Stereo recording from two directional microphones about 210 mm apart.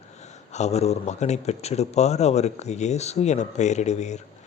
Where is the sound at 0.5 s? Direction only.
30° left (ahead or behind).